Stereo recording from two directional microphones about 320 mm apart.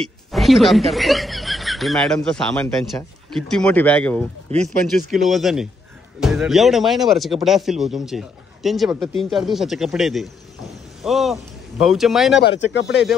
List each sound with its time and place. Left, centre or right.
0.0 s speech: centre
4.5 s speech: centre
5.1 s speech: centre
12.4 s speech: left